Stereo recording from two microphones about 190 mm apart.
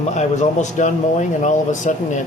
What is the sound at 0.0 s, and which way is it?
Speech, 35° left (ahead or behind).